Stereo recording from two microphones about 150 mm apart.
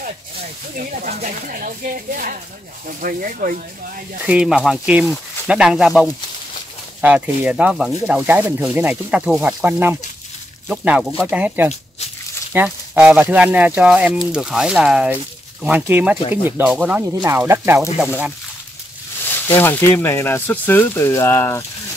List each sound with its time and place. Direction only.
0.7 s speech: 60° right (ahead or behind)
4.2 s speech: 5° right (ahead or behind)
17.1 s speech: 20° right (ahead or behind)
17.9 s speech: 5° right (ahead or behind)
19.3 s speech: 15° left (ahead or behind)